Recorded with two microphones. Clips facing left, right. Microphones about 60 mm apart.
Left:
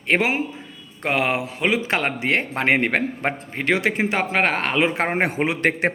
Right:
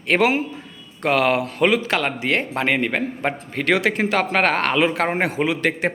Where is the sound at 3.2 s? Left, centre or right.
Left.